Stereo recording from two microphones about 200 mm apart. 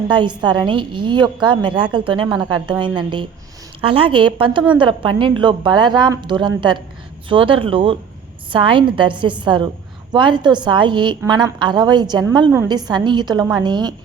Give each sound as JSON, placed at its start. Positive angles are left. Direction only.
{"t": 0.1, "sound": "a woman's voice", "side_deg": -20}